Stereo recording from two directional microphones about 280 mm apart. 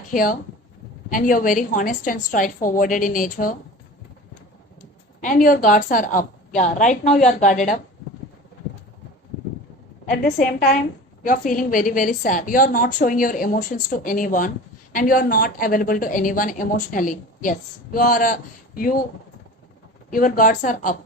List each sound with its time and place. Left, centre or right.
0.1 s a woman's voice: left
5.2 s a woman's voice: left
10.1 s a woman's voice: left
20.1 s a woman's voice: left